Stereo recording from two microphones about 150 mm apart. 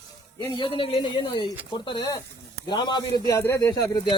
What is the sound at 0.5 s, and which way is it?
A man's voice, 35° left (ahead or behind).